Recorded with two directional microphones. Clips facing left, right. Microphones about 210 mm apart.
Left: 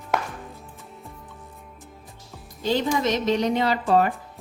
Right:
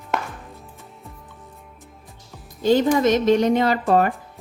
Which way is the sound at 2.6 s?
50° right (ahead or behind).